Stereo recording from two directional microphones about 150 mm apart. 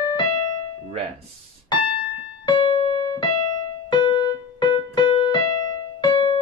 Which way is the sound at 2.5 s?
35° left (ahead or behind).